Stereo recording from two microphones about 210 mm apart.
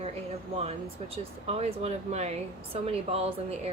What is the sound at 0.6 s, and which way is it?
A woman's voice, 30° right (ahead or behind).